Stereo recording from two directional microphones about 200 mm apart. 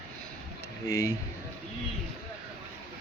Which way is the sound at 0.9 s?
15° left (ahead or behind).